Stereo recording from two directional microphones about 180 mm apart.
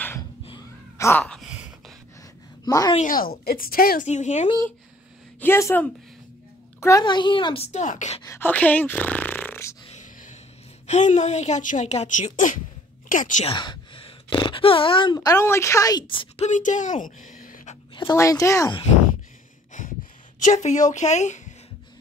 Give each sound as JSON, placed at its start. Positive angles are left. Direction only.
{"t": 0.9, "sound": "a sound", "side_deg": 15}
{"t": 2.6, "sound": "a woman's voice", "side_deg": 20}
{"t": 3.0, "sound": "speech", "side_deg": 50}
{"t": 5.4, "sound": "a woman's voice", "side_deg": 15}
{"t": 8.2, "sound": "speech", "side_deg": 15}
{"t": 9.8, "sound": "a sound", "side_deg": 40}
{"t": 10.9, "sound": "a woman's voice", "side_deg": 40}
{"t": 13.5, "sound": "speech", "side_deg": 25}
{"t": 16.4, "sound": "a woman's voice", "side_deg": 45}
{"t": 17.9, "sound": "speech", "side_deg": 20}
{"t": 19.8, "sound": "a sound", "side_deg": 45}
{"t": 20.3, "sound": "a woman's voice", "side_deg": 40}